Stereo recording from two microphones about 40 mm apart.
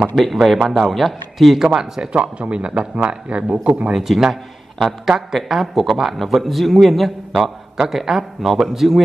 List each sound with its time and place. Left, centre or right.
0.1 s a man's voice: centre
1.6 s a man's voice: centre
2.1 s speech: right
3.9 s a man's voice: centre